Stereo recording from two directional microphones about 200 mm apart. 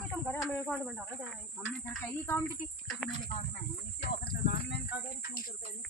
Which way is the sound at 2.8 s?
Centre (ahead or behind).